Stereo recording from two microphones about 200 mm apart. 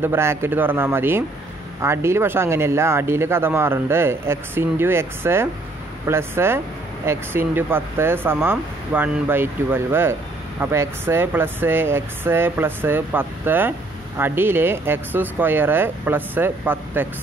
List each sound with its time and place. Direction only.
0.0 s speech: 10° right (ahead or behind)